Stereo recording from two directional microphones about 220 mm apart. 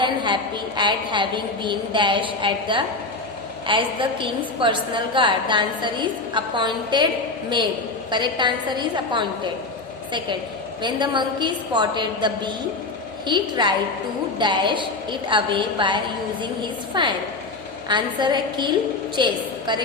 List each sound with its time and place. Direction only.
0.0 s a woman's voice: 20° right (ahead or behind)
8.1 s a woman's voice: 20° right (ahead or behind)
10.8 s a woman's voice: 20° right (ahead or behind)